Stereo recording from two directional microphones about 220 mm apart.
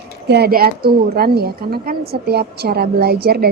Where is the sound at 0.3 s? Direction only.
45° right (ahead or behind).